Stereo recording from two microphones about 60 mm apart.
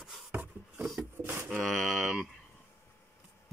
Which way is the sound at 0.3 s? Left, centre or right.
Right.